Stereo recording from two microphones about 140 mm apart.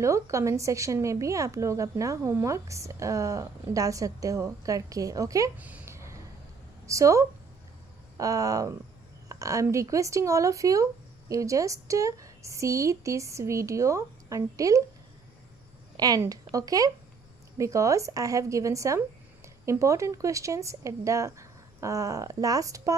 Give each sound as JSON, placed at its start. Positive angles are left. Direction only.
{"t": 0.0, "sound": "a woman's voice", "side_deg": -20}
{"t": 5.6, "sound": "a sound", "side_deg": -10}
{"t": 6.9, "sound": "a woman's voice", "side_deg": -20}
{"t": 16.0, "sound": "a woman's voice", "side_deg": -25}